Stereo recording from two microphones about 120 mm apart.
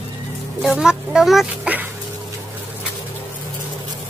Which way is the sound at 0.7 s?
5° right (ahead or behind).